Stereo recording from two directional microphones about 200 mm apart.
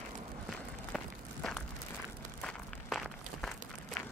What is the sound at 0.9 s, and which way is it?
Walk, 5° left (ahead or behind).